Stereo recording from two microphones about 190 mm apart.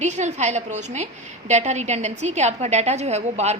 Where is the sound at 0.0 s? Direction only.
35° right (ahead or behind).